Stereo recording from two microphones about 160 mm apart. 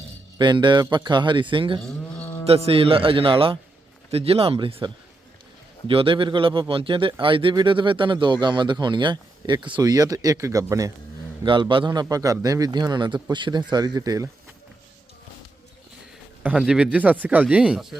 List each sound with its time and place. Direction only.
0.3 s speech: 30° right (ahead or behind)
2.1 s a sound: 10° left (ahead or behind)
2.5 s speech: 35° right (ahead or behind)
5.9 s speech: 35° right (ahead or behind)
16.4 s speech: 5° right (ahead or behind)